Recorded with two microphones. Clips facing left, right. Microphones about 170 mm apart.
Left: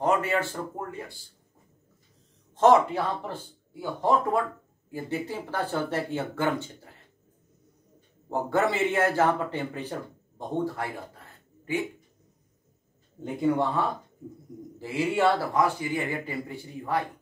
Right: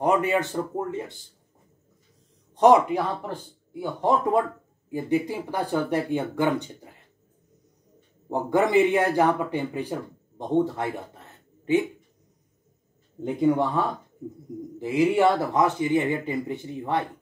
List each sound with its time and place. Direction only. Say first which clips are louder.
0.0 s speech: right 3 dB; 15° right (ahead or behind)
2.5 s speech: right 2 dB; 15° right (ahead or behind)
8.3 s a man's voice: right 3 dB; 15° right (ahead or behind)
13.2 s speech: right 3 dB; 20° right (ahead or behind)